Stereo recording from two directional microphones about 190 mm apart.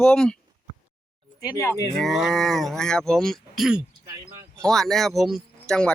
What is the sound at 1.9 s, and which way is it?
Speech, centre (ahead or behind).